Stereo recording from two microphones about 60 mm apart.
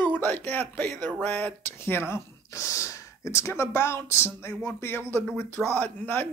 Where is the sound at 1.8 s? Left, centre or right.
Left.